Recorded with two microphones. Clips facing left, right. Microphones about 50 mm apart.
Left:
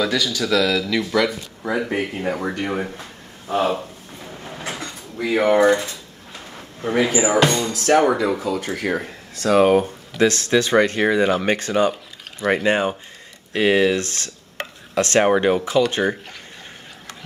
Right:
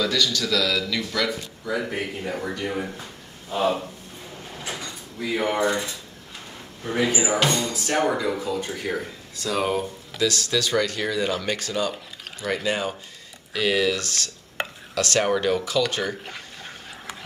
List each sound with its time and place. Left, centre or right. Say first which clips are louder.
0.0 s speech: left 2 dB; centre
1.6 s speech: left 6 dB; left
5.5 s speech: left 10 dB; left
6.8 s speech: left 5 dB; left
7.2 s speech: left 5 dB; left
7.7 s speech: left 9 dB; left
8.0 s speech: left 5 dB; left